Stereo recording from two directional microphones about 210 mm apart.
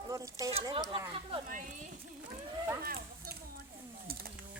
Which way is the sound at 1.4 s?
40° right (ahead or behind).